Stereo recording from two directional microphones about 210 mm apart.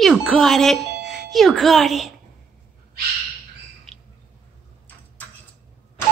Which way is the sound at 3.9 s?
Centre (ahead or behind).